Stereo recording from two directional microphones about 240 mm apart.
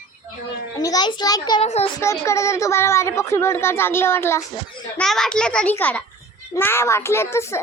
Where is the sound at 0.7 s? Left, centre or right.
Centre.